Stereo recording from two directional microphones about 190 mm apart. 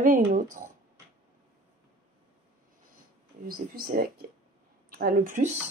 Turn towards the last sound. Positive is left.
turn(degrees=-45)  # may be behind; listen again after turning